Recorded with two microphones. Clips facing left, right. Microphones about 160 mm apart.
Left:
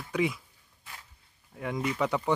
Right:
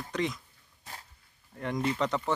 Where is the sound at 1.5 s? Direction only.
5° left (ahead or behind).